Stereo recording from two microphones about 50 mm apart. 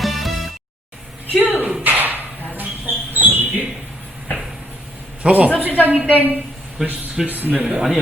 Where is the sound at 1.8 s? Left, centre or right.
Right.